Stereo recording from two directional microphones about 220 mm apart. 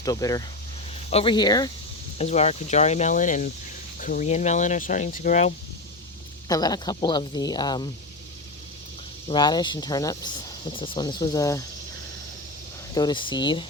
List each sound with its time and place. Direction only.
0.0 s speech: 15° left (ahead or behind)
2.1 s speech: 30° left (ahead or behind)
6.5 s speech: 15° left (ahead or behind)
9.2 s speech: 20° left (ahead or behind)
12.9 s speech: 20° left (ahead or behind)